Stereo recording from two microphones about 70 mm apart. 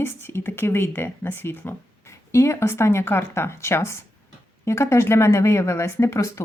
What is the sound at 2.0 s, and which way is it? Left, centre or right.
Speech, left.